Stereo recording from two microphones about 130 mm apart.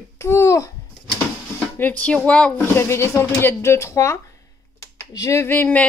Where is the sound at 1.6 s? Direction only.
10° left (ahead or behind).